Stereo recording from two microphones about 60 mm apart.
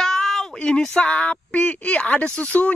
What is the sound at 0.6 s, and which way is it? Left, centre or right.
Speech, centre.